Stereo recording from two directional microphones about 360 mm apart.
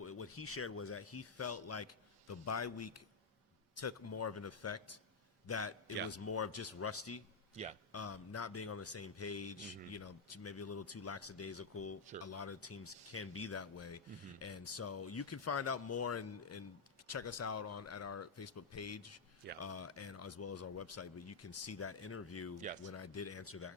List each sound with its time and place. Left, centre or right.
0.0 s speech: left
7.5 s a man's voice: centre
7.9 s speech: left